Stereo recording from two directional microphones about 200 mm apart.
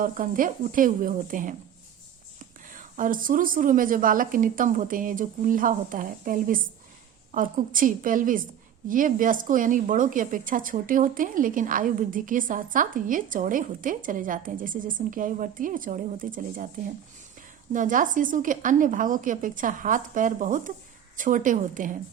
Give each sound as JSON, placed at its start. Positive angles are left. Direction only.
{"t": 0.0, "sound": "a woman's voice", "side_deg": -45}
{"t": 17.7, "sound": "a woman's voice", "side_deg": -40}